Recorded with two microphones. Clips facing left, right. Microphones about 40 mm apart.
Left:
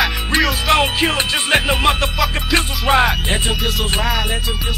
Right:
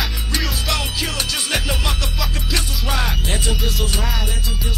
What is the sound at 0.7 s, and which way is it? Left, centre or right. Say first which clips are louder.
Music: left 8 dB; left.